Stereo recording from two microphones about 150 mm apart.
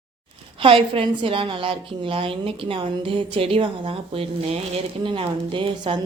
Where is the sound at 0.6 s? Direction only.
35° right (ahead or behind).